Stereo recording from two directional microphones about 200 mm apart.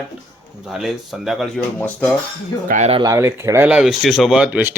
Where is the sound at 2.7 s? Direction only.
30° right (ahead or behind).